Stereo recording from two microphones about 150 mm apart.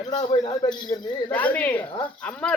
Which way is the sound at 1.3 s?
10° left (ahead or behind).